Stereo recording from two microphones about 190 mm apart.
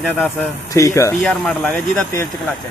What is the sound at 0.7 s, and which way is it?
Speech, 15° left (ahead or behind).